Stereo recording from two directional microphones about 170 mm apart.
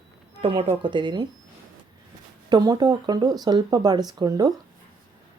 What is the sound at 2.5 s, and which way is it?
Speech, 25° right (ahead or behind).